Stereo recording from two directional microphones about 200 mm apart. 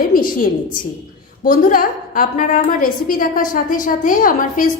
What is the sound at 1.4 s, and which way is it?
A woman's voice, 45° left (ahead or behind).